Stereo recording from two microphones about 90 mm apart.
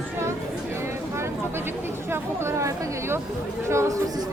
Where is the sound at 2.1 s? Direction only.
30° right (ahead or behind).